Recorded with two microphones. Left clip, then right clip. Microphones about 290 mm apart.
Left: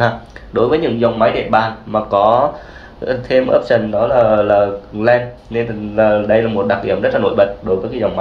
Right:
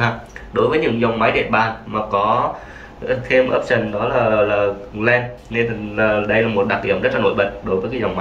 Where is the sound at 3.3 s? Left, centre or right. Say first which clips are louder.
Left 4 dB; centre.